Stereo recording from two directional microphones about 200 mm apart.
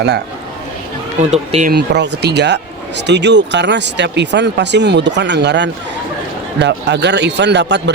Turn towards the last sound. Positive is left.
turn(degrees=-60)  # may be behind; listen again after turning